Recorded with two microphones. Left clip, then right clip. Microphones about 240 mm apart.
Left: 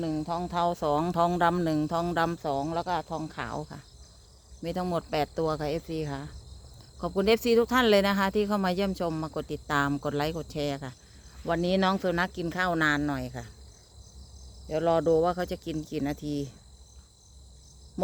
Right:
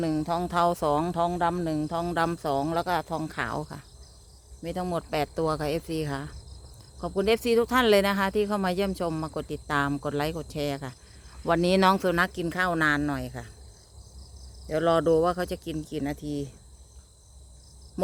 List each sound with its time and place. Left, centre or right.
0.0 s speech: right
1.1 s speech: centre
2.1 s speech: centre
2.4 s speech: centre
4.6 s speech: centre
7.0 s speech: centre
11.4 s speech: centre
14.7 s speech: centre